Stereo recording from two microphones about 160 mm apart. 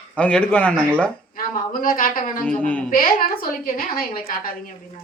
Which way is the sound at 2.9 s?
65° left (ahead or behind).